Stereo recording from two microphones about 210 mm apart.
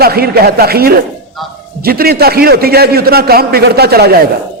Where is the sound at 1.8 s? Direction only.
45° right (ahead or behind).